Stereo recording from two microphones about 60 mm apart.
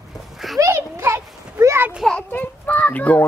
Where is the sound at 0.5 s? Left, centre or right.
Right.